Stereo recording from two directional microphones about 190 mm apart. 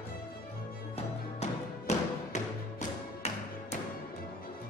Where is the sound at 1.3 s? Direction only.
35° left (ahead or behind).